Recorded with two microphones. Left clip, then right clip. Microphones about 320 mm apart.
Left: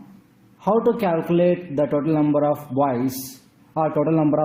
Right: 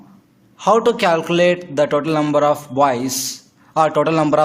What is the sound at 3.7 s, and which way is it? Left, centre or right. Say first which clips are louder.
Speech: right 5 dB; right.